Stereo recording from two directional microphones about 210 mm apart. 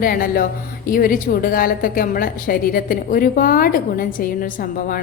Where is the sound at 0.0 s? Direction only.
45° left (ahead or behind).